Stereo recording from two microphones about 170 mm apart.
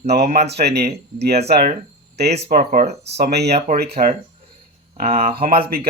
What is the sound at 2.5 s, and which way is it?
Speech, 55° right (ahead or behind).